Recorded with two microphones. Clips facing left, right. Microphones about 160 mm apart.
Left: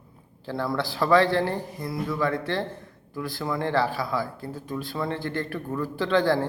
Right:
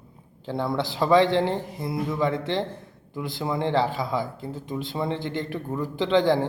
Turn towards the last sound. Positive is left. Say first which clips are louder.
# right 2 dB
turn(degrees=-20)  # may be behind; listen again after turning